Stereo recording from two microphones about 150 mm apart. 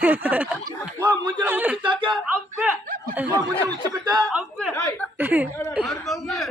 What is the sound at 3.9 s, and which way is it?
Speech, 25° right (ahead or behind).